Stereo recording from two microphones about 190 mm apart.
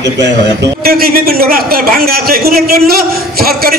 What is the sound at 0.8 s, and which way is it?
A man's voice, 50° right (ahead or behind).